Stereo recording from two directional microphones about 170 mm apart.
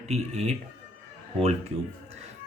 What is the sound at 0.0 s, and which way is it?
Speech, 40° right (ahead or behind).